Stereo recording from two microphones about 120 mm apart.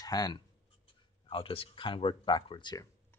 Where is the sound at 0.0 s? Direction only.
30° left (ahead or behind).